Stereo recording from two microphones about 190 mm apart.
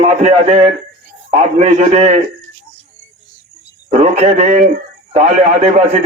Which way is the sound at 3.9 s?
35° right (ahead or behind).